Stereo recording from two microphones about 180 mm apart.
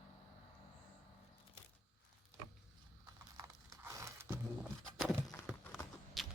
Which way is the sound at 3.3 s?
15° right (ahead or behind).